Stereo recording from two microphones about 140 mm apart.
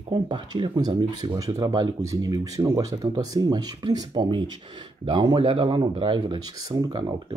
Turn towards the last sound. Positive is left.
turn(degrees=-35)  # may be behind; listen again after turning